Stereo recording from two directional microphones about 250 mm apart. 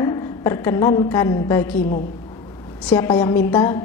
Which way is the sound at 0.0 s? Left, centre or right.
Centre.